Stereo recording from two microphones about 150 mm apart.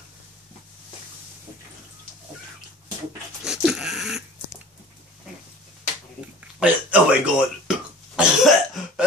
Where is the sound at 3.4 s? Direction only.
5° right (ahead or behind).